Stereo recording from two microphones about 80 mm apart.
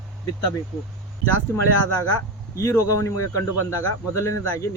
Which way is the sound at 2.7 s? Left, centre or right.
Left.